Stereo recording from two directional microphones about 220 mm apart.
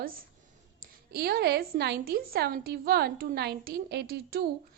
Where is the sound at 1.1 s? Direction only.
45° right (ahead or behind).